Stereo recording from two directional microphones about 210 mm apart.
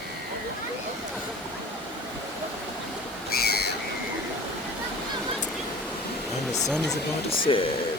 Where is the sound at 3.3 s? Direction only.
50° left (ahead or behind).